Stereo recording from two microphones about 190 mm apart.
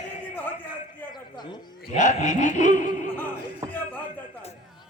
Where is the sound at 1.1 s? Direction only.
25° left (ahead or behind).